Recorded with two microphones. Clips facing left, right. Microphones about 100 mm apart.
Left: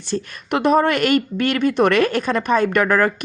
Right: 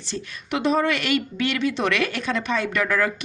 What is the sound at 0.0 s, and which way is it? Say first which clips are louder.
A woman's voice: left 7 dB; 50° left (ahead or behind).